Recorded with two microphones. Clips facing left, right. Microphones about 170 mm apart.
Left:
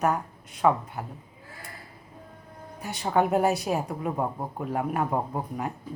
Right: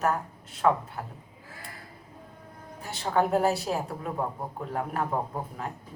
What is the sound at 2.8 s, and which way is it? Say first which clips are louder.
Speech: left 2 dB; 15° left (ahead or behind).